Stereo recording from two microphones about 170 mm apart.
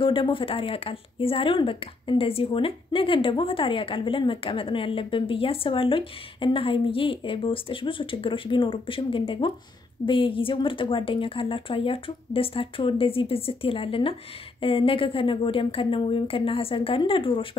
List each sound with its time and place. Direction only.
0.0 s speech: 30° left (ahead or behind)